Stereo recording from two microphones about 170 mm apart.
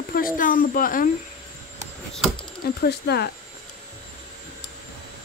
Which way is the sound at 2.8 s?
70° left (ahead or behind).